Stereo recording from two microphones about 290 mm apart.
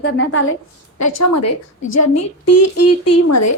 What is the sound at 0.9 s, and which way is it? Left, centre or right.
A woman's voice, left.